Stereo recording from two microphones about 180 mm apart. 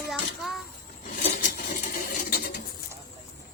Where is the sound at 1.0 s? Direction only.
45° left (ahead or behind).